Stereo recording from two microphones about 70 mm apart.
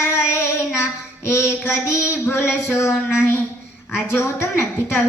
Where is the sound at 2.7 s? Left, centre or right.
Left.